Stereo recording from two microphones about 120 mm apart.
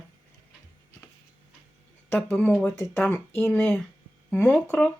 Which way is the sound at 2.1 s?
15° left (ahead or behind).